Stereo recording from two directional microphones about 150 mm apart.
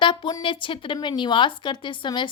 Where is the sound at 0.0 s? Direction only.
30° left (ahead or behind).